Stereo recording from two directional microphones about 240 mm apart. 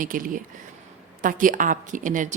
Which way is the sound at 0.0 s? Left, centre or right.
Right.